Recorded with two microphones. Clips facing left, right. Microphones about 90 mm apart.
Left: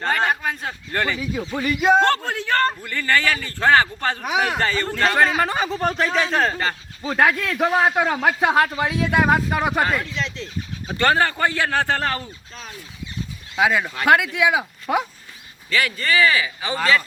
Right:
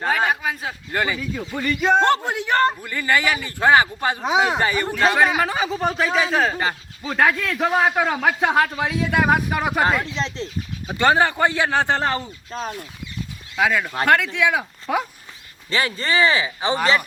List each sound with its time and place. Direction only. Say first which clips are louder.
0.0 s speech: even; 5° right (ahead or behind)
1.2 s speech: left 1 dB; 10° left (ahead or behind)
2.0 s speech: right 1 dB; 15° right (ahead or behind)
5.4 s speech: even; centre (ahead or behind)
9.3 s speech: left 1 dB; 10° right (ahead or behind)
10.0 s speech: right 2 dB; 35° right (ahead or behind)
10.8 s speech: right 1 dB; 15° right (ahead or behind)
12.5 s speech: right 12 dB; 45° right (ahead or behind)
13.6 s speech: even; 5° left (ahead or behind)
15.7 s speech: even; 30° right (ahead or behind)